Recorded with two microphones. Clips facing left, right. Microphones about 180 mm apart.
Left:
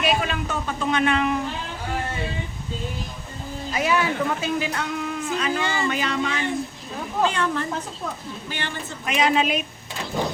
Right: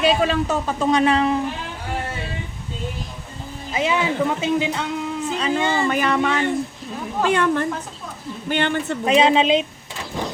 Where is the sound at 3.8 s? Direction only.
20° right (ahead or behind).